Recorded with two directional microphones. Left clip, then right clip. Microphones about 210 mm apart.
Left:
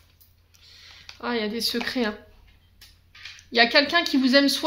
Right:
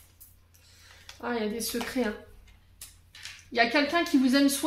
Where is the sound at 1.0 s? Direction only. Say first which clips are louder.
Left 4 dB; 35° left (ahead or behind).